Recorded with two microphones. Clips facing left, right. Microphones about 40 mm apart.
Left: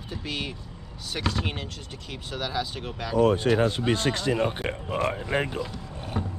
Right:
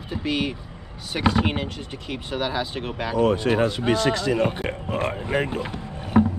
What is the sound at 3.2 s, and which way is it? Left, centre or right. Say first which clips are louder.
Speech: right 1 dB; right.